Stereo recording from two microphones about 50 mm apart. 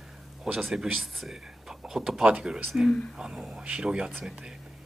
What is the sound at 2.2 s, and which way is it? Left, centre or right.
Speech, centre.